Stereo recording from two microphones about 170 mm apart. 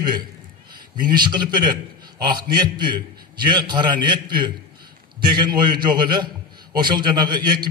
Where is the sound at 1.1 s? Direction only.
25° right (ahead or behind).